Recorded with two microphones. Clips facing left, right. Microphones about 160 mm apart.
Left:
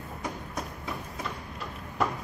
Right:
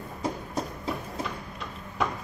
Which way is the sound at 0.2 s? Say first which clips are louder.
Right 6 dB; 30° right (ahead or behind).